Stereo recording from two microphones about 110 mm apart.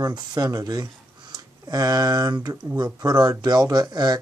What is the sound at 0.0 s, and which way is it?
Speech, 35° right (ahead or behind).